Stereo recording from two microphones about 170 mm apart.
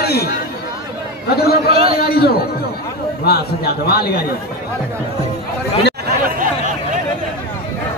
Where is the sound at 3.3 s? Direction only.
65° left (ahead or behind).